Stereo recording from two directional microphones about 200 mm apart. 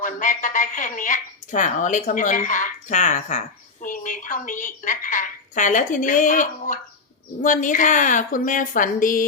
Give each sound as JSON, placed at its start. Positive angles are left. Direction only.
{"t": 0.0, "sound": "a woman's voice", "side_deg": 40}